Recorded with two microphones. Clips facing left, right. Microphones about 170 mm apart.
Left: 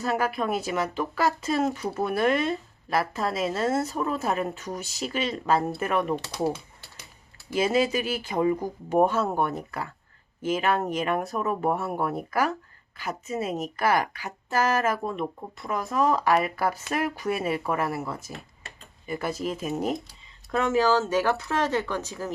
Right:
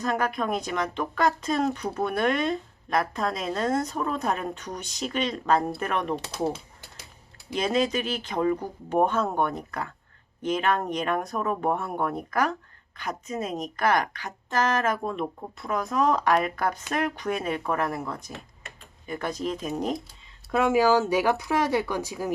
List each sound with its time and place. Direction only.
0.0 s a woman's voice: 5° left (ahead or behind)
7.5 s a woman's voice: 5° left (ahead or behind)
18.6 s tick-tock: 35° left (ahead or behind)
19.0 s a woman's voice: 5° left (ahead or behind)
20.5 s speech: 10° right (ahead or behind)